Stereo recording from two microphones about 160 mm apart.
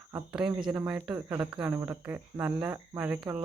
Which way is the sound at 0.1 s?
5° right (ahead or behind).